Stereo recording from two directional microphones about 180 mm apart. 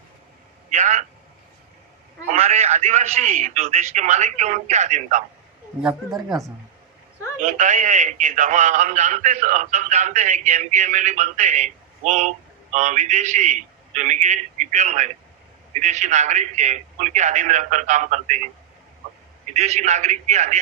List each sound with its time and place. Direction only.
0.7 s a sound: 45° right (ahead or behind)
2.2 s a man's voice: 35° right (ahead or behind)
5.8 s speech: 5° right (ahead or behind)
7.4 s a man's voice: 45° right (ahead or behind)
19.5 s a man's voice: 40° right (ahead or behind)